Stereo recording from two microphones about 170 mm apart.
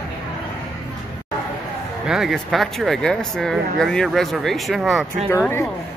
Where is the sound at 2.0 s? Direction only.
Centre (ahead or behind).